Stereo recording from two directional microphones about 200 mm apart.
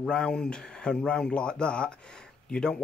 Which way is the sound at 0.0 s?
5° left (ahead or behind).